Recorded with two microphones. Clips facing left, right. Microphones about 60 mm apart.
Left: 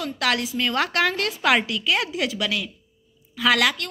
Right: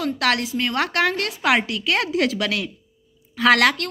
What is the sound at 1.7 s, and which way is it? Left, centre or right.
A woman's voice, right.